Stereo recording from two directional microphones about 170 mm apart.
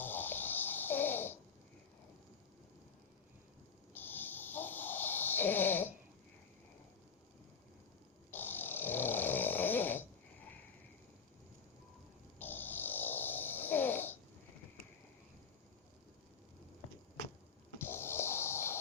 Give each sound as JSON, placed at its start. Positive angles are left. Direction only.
{"t": 0.0, "sound": "a sound", "side_deg": 10}
{"t": 3.9, "sound": "snoring", "side_deg": 10}
{"t": 8.3, "sound": "snoring", "side_deg": 10}
{"t": 12.4, "sound": "snoring", "side_deg": 10}
{"t": 17.7, "sound": "snort", "side_deg": 15}